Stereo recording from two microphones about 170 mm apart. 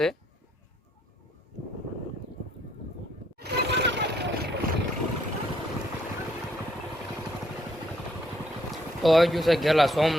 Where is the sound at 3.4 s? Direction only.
85° right.